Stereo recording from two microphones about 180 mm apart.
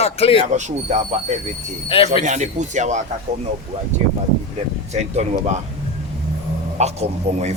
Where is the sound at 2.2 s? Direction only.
40° right (ahead or behind).